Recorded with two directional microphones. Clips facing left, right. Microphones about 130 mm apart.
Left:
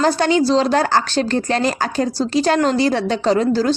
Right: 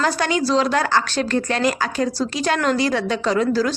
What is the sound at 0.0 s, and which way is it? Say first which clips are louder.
A woman's voice: left 5 dB; 30° left (ahead or behind).